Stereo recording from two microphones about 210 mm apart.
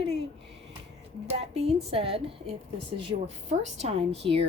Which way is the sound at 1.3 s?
30° right (ahead or behind).